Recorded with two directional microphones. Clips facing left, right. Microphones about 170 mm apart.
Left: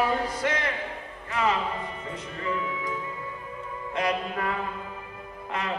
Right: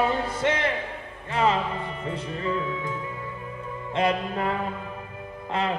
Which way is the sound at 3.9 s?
25° right (ahead or behind).